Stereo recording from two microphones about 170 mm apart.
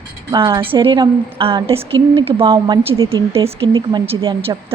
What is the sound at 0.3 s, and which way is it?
A woman's voice, 30° right (ahead or behind).